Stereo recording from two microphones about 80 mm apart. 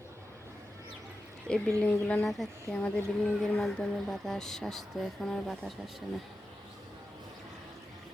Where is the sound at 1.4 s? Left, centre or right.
Centre.